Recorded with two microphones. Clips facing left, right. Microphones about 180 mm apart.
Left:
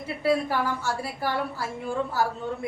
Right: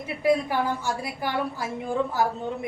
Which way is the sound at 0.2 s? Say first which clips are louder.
Right 2 dB; 15° right (ahead or behind).